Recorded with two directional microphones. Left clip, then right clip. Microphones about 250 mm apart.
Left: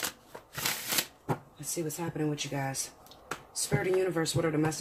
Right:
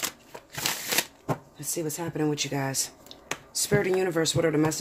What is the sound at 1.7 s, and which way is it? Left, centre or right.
Speech, right.